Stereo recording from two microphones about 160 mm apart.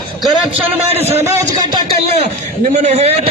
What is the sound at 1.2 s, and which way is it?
Speech, 20° right (ahead or behind).